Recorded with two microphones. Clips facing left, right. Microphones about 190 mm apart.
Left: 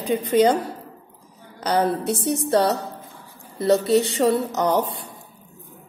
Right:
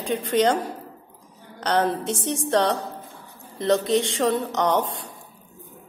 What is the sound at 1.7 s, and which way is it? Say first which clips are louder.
A woman's voice: left 2 dB; 5° left (ahead or behind).